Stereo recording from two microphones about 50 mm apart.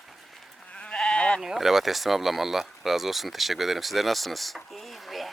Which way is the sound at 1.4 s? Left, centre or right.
Centre.